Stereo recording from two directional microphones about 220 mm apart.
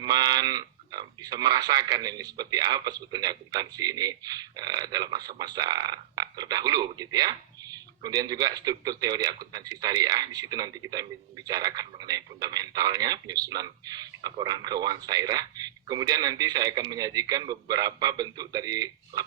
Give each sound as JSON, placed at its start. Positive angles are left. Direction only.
{"t": 0.0, "sound": "speech", "side_deg": -15}